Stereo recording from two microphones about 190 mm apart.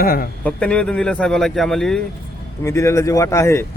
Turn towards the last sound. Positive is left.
turn(degrees=15)  # may be behind; listen again after turning